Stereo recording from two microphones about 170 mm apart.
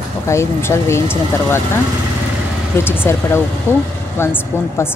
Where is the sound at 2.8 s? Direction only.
15° left (ahead or behind).